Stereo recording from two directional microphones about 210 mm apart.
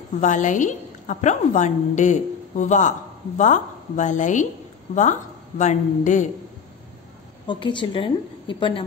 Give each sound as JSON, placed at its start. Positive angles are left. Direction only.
{"t": 0.2, "sound": "a woman's voice", "side_deg": 35}
{"t": 5.6, "sound": "a woman's voice", "side_deg": 35}
{"t": 7.4, "sound": "a woman's voice", "side_deg": 20}